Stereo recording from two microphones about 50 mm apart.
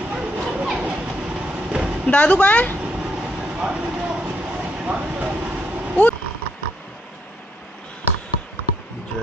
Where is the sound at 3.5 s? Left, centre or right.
Centre.